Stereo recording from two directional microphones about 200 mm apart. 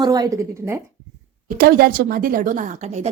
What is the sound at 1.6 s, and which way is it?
A woman's voice, 50° right (ahead or behind).